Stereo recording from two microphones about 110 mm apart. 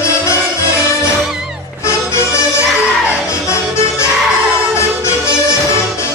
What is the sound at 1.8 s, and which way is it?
Music, 25° left (ahead or behind).